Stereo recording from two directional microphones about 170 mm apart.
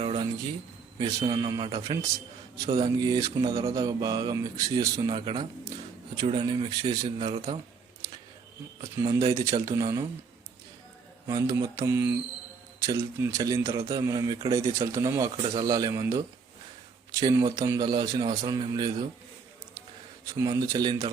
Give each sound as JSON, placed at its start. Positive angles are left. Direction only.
{"t": 0.0, "sound": "a sound", "side_deg": -35}
{"t": 0.9, "sound": "speech", "side_deg": -25}
{"t": 7.3, "sound": "speech", "side_deg": -40}
{"t": 8.8, "sound": "speech", "side_deg": -20}
{"t": 11.3, "sound": "speech", "side_deg": -20}
{"t": 20.2, "sound": "speech", "side_deg": -20}